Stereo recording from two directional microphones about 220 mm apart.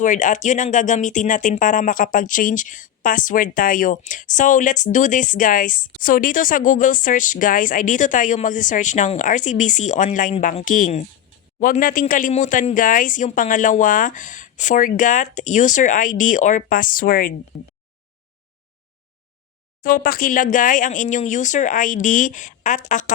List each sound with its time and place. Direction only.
0.0 s speech: 35° left (ahead or behind)
19.8 s speech: 40° left (ahead or behind)